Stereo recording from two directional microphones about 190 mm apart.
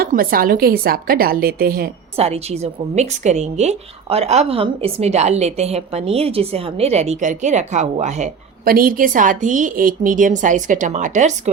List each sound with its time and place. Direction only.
0.0 s a woman's voice: 50° right (ahead or behind)
2.1 s a woman's voice: 35° right (ahead or behind)